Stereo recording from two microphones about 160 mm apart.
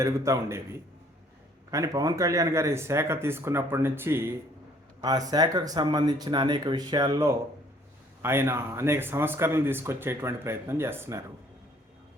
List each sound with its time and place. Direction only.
0.0 s speech: 20° right (ahead or behind)
1.7 s speech: 20° right (ahead or behind)